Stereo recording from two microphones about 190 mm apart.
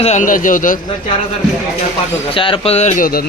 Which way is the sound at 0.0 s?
40° left (ahead or behind).